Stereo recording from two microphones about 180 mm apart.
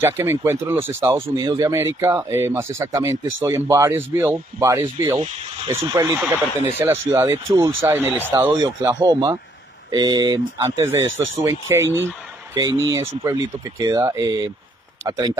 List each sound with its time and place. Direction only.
0.0 s speech: 15° right (ahead or behind)